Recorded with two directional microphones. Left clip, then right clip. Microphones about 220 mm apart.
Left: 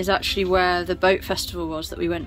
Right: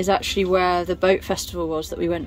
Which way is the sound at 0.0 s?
10° right (ahead or behind).